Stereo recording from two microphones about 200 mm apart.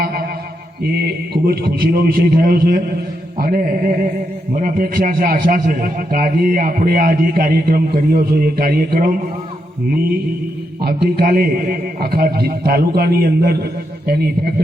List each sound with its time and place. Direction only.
0.0 s mantra: 50° right (ahead or behind)
0.9 s a man's voice: 50° right (ahead or behind)
10.8 s a man's voice: 50° right (ahead or behind)